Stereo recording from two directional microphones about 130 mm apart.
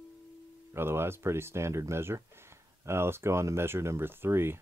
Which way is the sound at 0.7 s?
20° right (ahead or behind).